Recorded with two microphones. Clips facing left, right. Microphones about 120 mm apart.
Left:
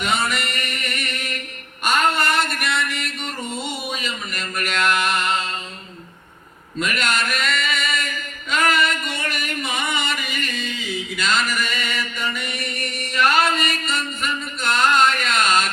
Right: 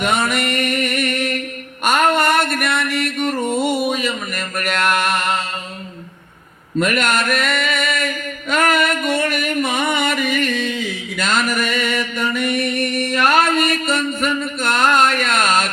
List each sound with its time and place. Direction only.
0.0 s music: 50° right (ahead or behind)
1.8 s a sound: 50° right (ahead or behind)
6.7 s mantra: 50° right (ahead or behind)